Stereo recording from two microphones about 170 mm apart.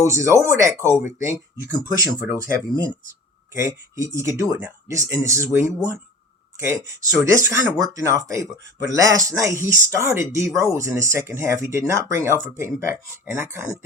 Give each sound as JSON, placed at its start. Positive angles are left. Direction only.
{"t": 0.0, "sound": "speech", "side_deg": -15}
{"t": 3.5, "sound": "speech", "side_deg": -15}